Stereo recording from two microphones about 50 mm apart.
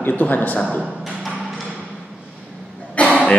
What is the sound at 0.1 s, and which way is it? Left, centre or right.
Speech, left.